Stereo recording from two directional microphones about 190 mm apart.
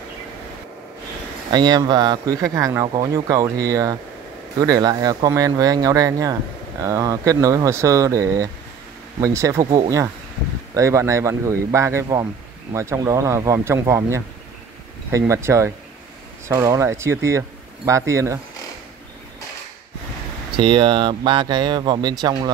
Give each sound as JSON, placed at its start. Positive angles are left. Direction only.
{"t": 1.5, "sound": "speech", "side_deg": -20}
{"t": 20.5, "sound": "speech", "side_deg": -25}